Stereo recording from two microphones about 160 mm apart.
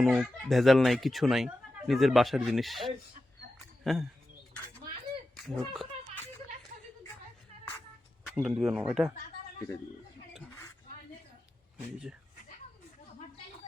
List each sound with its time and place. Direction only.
0.0 s speech: centre (ahead or behind)
5.5 s speech: centre (ahead or behind)
8.4 s speech: 5° right (ahead or behind)